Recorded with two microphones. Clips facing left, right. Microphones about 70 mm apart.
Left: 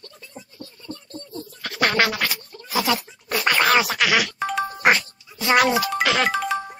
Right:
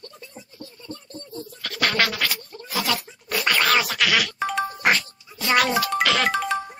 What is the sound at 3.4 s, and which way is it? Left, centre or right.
Music, centre.